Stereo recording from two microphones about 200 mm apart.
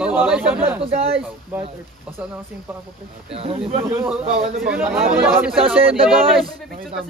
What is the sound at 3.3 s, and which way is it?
Speech, 30° right (ahead or behind).